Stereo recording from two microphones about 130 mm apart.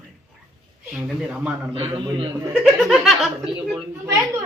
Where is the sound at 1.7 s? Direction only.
45° right (ahead or behind).